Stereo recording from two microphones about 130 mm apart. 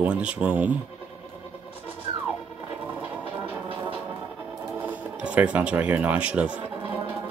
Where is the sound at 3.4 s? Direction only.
40° right (ahead or behind).